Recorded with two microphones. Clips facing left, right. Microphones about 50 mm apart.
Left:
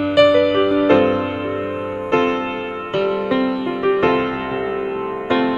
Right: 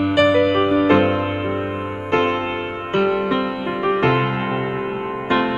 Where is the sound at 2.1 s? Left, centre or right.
Centre.